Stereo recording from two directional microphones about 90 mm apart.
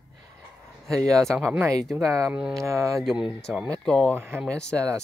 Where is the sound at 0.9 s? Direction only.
40° right (ahead or behind).